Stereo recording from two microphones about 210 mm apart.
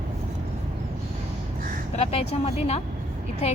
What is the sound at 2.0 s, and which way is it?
Speech, 30° left (ahead or behind).